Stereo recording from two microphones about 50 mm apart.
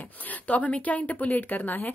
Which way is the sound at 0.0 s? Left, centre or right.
Left.